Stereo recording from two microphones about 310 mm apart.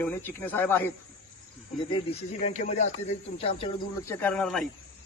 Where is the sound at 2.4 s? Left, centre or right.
Left.